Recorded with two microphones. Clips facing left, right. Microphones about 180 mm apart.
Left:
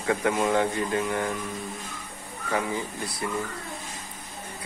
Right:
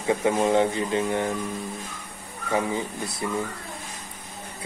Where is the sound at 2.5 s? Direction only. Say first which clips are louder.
Right 3 dB; 20° right (ahead or behind).